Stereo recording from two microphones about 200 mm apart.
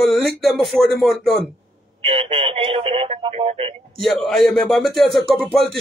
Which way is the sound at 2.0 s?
30° right (ahead or behind).